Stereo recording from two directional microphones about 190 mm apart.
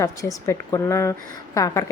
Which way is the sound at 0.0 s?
15° left (ahead or behind).